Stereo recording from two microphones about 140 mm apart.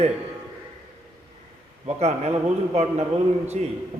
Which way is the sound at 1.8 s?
50° right (ahead or behind).